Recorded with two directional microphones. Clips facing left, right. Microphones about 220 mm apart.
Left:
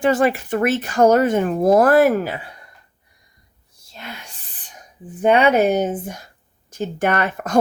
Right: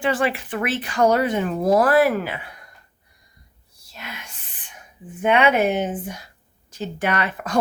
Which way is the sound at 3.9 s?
30° left (ahead or behind).